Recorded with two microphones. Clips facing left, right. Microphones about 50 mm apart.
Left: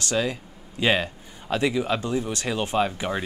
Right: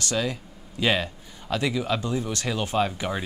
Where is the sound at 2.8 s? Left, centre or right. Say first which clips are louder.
Left 1 dB; centre.